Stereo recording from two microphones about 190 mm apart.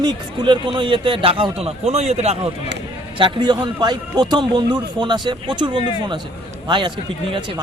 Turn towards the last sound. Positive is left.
turn(degrees=-25)  # may be behind; listen again after turning